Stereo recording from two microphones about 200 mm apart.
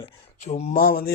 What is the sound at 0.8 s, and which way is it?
Speech, 50° left (ahead or behind).